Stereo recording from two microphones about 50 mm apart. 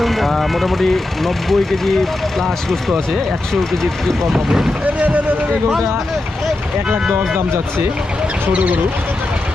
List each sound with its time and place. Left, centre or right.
0.0 s speech: centre
4.3 s speech: centre
8.5 s speech: right